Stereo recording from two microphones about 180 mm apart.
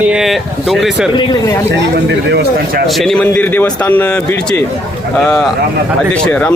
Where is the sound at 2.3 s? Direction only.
65° right (ahead or behind).